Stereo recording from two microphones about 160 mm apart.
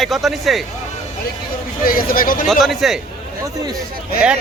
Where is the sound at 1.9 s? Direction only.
65° left (ahead or behind).